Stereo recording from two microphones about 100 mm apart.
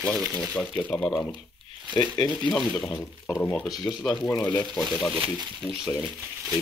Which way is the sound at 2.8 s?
15° left (ahead or behind).